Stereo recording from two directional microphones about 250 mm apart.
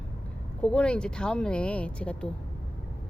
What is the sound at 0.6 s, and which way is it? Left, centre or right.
A woman's voice, centre.